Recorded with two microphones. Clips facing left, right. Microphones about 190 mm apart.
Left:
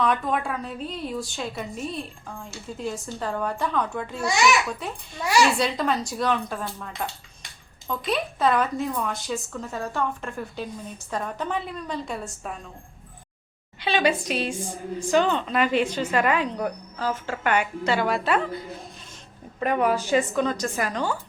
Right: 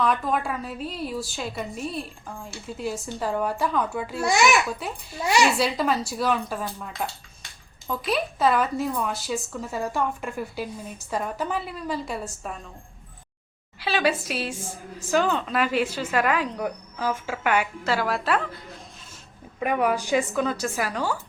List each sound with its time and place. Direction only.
0.0 s a woman's voice: centre (ahead or behind)
5.2 s speech: 20° right (ahead or behind)
5.5 s speech: 5° right (ahead or behind)
13.7 s a woman's voice: 5° right (ahead or behind)